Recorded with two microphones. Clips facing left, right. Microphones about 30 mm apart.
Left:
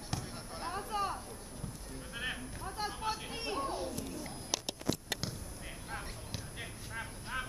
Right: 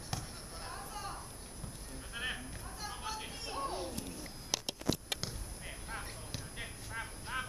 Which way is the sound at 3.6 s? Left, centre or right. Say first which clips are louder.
Even; centre.